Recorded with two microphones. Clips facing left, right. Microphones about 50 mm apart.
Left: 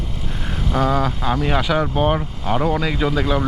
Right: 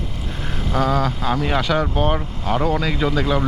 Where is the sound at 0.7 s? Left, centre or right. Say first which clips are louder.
Left 1 dB; centre.